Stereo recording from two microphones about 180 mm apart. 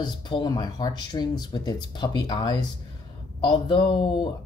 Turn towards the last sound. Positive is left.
turn(degrees=25)  # may be behind; listen again after turning